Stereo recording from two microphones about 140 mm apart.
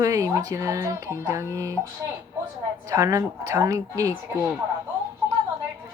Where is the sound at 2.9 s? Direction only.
25° right (ahead or behind).